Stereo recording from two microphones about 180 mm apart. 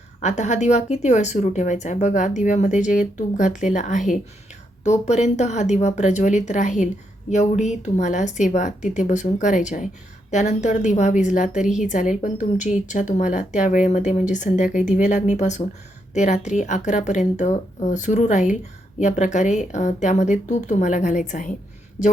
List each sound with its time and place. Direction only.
0.2 s a woman's voice: 40° left (ahead or behind)